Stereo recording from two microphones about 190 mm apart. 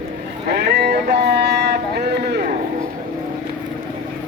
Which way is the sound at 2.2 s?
60° right (ahead or behind).